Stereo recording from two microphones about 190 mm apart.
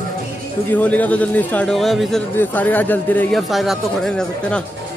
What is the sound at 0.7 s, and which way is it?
Speech, 10° left (ahead or behind).